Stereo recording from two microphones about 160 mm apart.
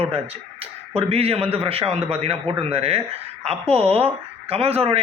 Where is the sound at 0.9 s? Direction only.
40° right (ahead or behind).